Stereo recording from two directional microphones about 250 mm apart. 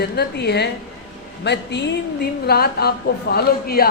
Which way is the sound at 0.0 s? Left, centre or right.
Left.